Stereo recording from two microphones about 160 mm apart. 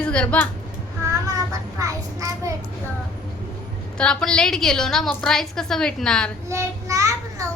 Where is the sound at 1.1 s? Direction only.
20° right (ahead or behind).